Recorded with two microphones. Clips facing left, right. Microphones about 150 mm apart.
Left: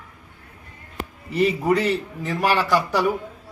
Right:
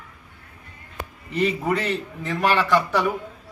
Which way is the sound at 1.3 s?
10° left (ahead or behind).